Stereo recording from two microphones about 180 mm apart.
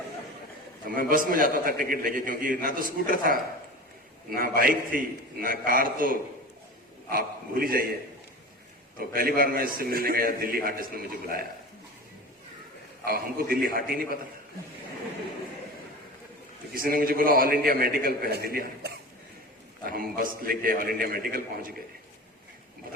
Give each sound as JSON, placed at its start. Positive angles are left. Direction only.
{"t": 0.9, "sound": "a man's voice", "side_deg": -50}
{"t": 4.4, "sound": "a man's voice", "side_deg": -55}
{"t": 9.0, "sound": "a man's voice", "side_deg": -55}
{"t": 13.1, "sound": "a man's voice", "side_deg": -55}
{"t": 16.7, "sound": "a man's voice", "side_deg": -55}